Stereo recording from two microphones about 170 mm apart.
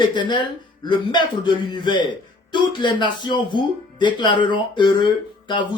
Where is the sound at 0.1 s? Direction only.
25° left (ahead or behind).